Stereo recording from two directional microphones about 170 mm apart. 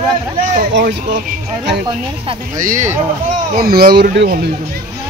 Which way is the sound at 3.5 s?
65° right (ahead or behind).